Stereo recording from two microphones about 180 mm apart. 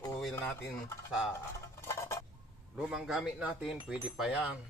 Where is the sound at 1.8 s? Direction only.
15° left (ahead or behind).